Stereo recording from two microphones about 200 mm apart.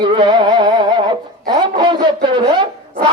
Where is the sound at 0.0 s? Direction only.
25° right (ahead or behind).